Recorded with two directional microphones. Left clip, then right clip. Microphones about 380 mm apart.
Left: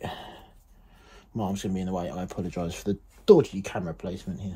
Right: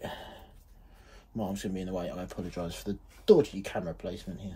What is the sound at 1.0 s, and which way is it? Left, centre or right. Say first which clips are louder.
Speech: left 4 dB; left.